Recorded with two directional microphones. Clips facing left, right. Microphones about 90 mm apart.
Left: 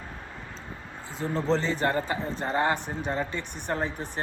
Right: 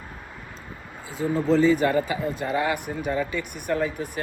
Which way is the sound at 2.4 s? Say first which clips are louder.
Even; 35° left (ahead or behind).